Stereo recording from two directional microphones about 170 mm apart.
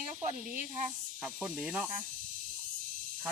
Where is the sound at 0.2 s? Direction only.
50° right (ahead or behind).